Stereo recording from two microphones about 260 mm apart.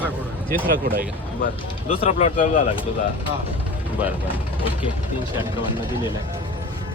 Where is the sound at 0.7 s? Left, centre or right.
Right.